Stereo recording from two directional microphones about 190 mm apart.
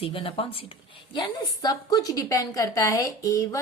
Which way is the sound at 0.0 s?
30° left (ahead or behind).